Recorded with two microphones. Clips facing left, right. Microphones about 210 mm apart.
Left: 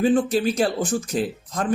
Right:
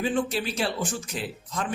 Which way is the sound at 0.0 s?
45° left (ahead or behind).